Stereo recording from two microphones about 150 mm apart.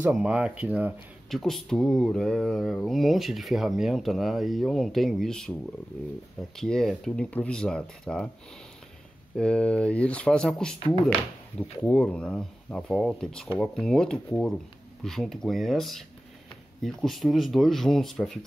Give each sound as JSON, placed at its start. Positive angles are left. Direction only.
{"t": 0.0, "sound": "speech", "side_deg": -5}
{"t": 1.3, "sound": "speech", "side_deg": 0}
{"t": 6.5, "sound": "speech", "side_deg": 5}
{"t": 9.4, "sound": "speech", "side_deg": 5}
{"t": 11.8, "sound": "speech", "side_deg": 5}